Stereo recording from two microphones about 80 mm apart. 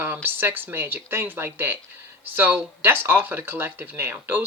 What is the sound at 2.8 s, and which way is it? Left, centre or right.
Speech, right.